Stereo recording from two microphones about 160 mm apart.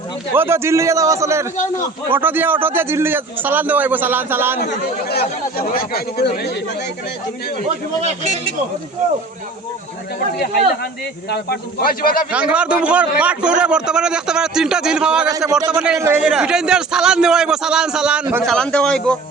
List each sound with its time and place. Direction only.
0.3 s a man's voice: 15° right (ahead or behind)
4.6 s speech: 80° left
8.0 s speech: 45° right (ahead or behind)
10.3 s speech: 80° left; by 12.2 s 65° left (ahead or behind)
12.3 s a man's voice: 10° right (ahead or behind)
15.3 s a man's voice: 25° right (ahead or behind)
18.4 s a man's voice: 5° left (ahead or behind)